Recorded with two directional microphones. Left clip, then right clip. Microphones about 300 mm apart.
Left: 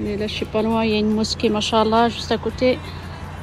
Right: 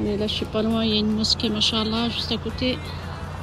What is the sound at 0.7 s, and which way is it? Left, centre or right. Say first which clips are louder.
Speech: left 4 dB; centre.